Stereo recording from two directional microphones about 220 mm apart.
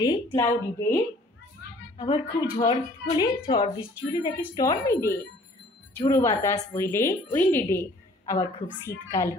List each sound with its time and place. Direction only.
0.0 s speech: 20° left (ahead or behind)
2.0 s speech: 20° left (ahead or behind)